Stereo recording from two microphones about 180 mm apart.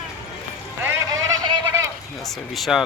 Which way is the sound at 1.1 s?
25° right (ahead or behind).